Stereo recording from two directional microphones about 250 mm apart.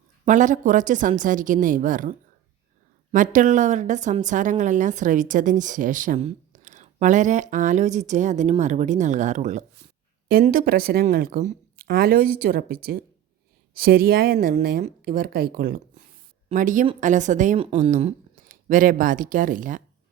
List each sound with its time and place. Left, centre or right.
0.3 s a woman's voice: right